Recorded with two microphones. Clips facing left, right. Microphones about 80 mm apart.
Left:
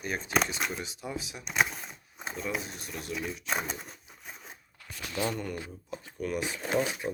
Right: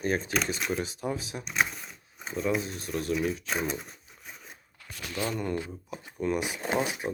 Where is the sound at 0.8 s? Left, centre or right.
Right.